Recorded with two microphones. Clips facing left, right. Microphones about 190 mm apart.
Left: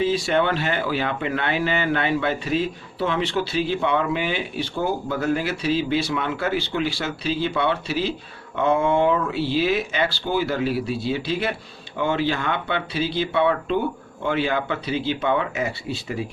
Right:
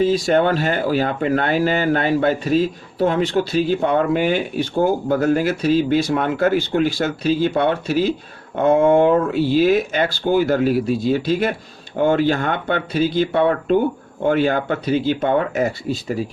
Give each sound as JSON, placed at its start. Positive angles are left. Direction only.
{"t": 0.0, "sound": "speech", "side_deg": -40}